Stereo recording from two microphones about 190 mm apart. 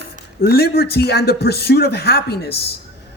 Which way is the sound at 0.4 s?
55° left (ahead or behind).